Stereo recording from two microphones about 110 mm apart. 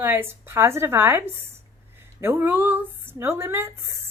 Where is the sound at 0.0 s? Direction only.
20° right (ahead or behind).